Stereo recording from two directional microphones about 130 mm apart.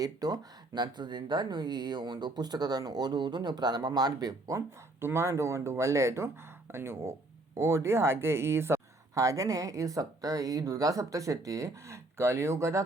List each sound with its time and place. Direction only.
0.0 s speech: 30° right (ahead or behind)